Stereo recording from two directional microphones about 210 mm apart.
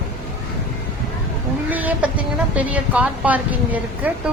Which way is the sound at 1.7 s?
10° right (ahead or behind).